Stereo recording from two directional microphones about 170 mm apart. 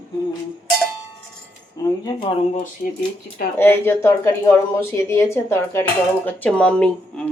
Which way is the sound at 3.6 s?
15° left (ahead or behind).